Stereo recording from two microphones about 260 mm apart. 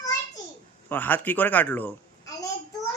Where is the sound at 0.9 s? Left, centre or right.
Centre.